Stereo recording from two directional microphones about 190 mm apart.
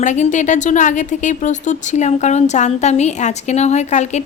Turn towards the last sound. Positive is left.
turn(degrees=35)  # may be behind; listen again after turning